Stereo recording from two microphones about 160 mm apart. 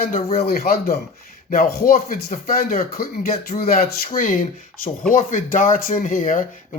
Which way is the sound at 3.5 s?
70° left (ahead or behind).